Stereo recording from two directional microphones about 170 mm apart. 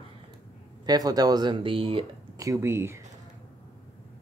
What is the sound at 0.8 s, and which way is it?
Speech, 20° right (ahead or behind).